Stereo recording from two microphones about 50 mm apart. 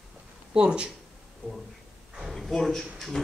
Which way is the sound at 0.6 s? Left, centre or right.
Centre.